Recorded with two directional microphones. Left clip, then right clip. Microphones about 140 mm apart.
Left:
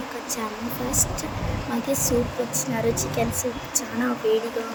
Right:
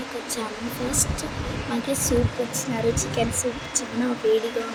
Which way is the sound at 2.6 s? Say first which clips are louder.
Even; 5° left (ahead or behind).